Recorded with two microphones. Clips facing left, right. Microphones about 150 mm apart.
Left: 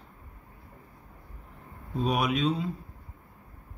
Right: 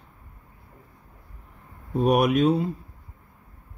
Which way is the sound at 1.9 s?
55° right (ahead or behind).